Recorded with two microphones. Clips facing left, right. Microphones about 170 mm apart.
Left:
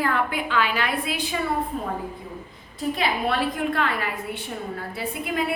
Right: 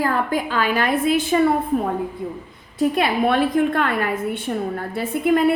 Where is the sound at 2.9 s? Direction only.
50° right (ahead or behind).